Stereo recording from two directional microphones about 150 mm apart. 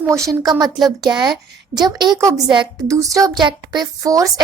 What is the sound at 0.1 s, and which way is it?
A woman's voice, 20° right (ahead or behind).